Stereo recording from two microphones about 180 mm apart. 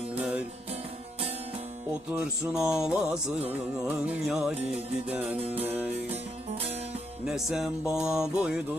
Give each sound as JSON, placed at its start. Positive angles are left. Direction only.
{"t": 0.2, "sound": "music", "side_deg": -10}
{"t": 2.1, "sound": "music", "side_deg": -5}
{"t": 5.4, "sound": "music", "side_deg": -35}
{"t": 5.6, "sound": "music", "side_deg": -10}
{"t": 7.3, "sound": "music", "side_deg": 0}